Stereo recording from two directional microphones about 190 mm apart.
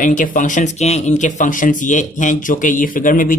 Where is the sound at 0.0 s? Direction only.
45° left (ahead or behind).